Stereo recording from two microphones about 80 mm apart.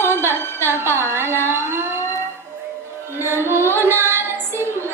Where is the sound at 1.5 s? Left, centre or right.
Right.